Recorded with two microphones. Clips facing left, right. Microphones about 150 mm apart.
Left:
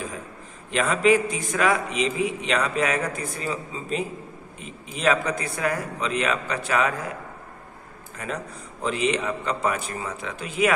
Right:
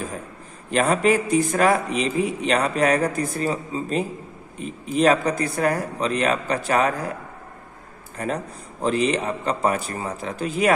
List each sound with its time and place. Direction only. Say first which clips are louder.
0.7 s a man's voice: right 1 dB; 45° right (ahead or behind)
8.8 s a man's voice: right 3 dB; 40° right (ahead or behind)